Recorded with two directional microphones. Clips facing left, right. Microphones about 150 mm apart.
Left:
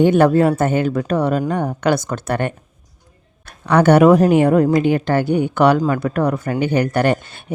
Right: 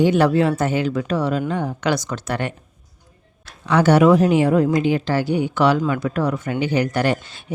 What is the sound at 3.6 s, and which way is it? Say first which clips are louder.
A woman's voice: left 3 dB; 55° left (ahead or behind).